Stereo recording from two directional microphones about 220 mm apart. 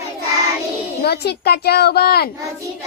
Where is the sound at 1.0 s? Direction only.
45° left (ahead or behind).